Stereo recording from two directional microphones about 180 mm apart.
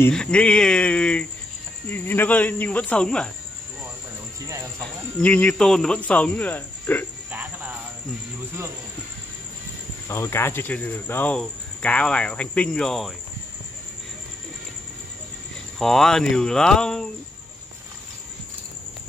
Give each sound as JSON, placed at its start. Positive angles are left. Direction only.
{"t": 0.0, "sound": "speech", "side_deg": 5}
{"t": 4.5, "sound": "music", "side_deg": -15}
{"t": 5.2, "sound": "speech", "side_deg": 10}
{"t": 7.2, "sound": "cricket", "side_deg": -10}
{"t": 10.0, "sound": "speech", "side_deg": 15}
{"t": 15.8, "sound": "speech", "side_deg": 0}